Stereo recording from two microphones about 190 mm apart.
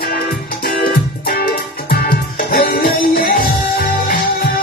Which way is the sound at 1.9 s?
55° left (ahead or behind).